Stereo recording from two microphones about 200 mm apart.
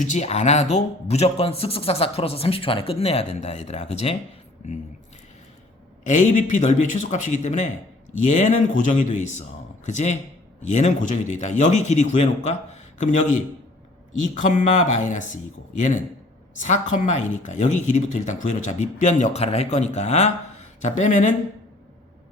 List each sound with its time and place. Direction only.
0.0 s speech: 35° left (ahead or behind)
6.1 s speech: 40° left (ahead or behind)
16.6 s speech: 35° left (ahead or behind)